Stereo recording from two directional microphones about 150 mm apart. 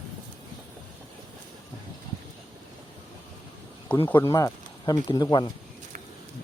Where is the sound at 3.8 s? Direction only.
15° left (ahead or behind).